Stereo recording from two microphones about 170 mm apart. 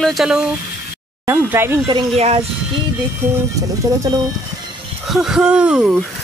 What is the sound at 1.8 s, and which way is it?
Speech, 35° right (ahead or behind).